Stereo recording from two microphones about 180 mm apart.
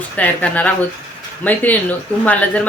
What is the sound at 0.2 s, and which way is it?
Speech, 10° left (ahead or behind).